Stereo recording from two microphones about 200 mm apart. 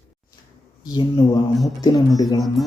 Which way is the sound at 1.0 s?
20° left (ahead or behind).